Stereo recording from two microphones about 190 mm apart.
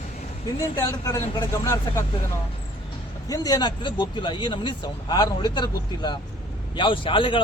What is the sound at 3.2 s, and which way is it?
Speech, 20° left (ahead or behind).